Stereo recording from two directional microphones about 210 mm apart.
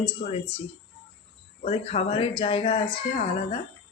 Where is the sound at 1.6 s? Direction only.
30° left (ahead or behind).